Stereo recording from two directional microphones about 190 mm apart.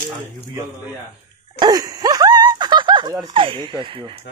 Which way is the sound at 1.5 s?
20° right (ahead or behind).